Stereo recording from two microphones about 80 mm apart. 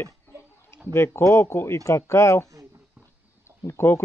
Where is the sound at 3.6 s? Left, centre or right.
Left.